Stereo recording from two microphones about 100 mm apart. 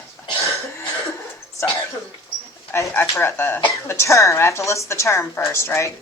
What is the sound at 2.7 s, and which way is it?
A woman's voice, 25° left (ahead or behind).